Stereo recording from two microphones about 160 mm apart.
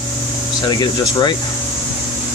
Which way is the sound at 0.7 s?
30° left (ahead or behind).